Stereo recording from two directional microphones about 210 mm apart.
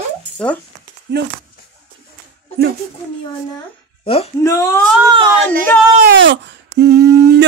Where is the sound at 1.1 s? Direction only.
55° right (ahead or behind).